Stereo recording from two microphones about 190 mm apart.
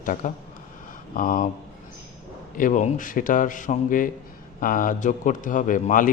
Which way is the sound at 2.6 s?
40° left (ahead or behind).